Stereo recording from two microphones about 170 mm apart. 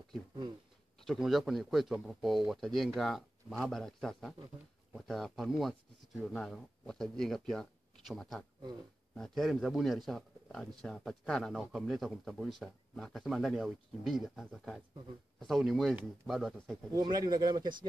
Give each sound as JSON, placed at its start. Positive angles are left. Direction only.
{"t": 1.0, "sound": "a man's voice", "side_deg": 0}
{"t": 16.9, "sound": "speech", "side_deg": -25}